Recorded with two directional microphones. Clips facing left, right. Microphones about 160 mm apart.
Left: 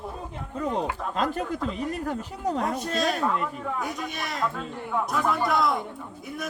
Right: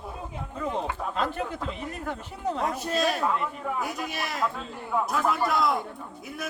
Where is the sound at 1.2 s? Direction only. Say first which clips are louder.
Left 4 dB; 40° left (ahead or behind).